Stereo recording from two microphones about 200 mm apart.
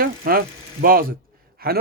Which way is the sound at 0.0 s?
50° right (ahead or behind).